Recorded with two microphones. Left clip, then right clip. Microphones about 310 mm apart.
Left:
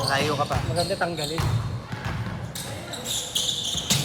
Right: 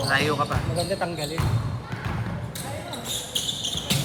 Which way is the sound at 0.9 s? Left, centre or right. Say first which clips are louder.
Left 1 dB; left.